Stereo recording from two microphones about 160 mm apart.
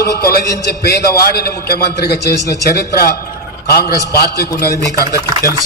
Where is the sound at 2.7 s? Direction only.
70° left (ahead or behind).